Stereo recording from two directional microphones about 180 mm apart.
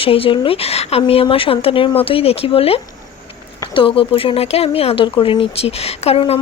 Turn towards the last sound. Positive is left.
turn(degrees=35)  # may be behind; listen again after turning